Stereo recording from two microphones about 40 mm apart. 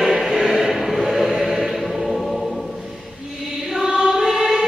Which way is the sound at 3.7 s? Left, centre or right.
Centre.